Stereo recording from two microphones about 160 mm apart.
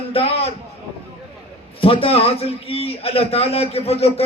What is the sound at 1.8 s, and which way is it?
A man's voice, 35° left (ahead or behind).